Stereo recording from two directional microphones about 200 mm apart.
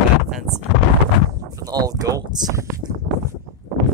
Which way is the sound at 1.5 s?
20° right (ahead or behind).